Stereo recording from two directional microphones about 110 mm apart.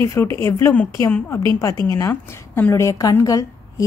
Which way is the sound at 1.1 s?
15° left (ahead or behind).